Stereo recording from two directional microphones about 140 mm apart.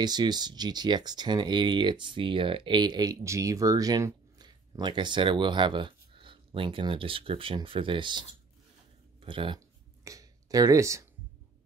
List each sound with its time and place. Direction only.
0.0 s speech: 30° right (ahead or behind)
10.0 s speech: 25° right (ahead or behind)